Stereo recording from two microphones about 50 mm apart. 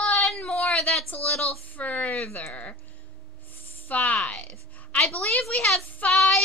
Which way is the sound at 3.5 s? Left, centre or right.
Left.